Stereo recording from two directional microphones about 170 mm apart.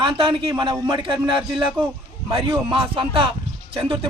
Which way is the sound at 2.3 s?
30° right (ahead or behind).